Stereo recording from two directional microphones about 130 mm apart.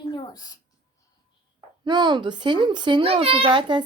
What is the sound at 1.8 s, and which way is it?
Speech, 35° right (ahead or behind).